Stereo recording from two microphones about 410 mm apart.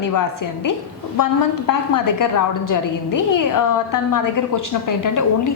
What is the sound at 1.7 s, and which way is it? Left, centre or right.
A woman's voice, left.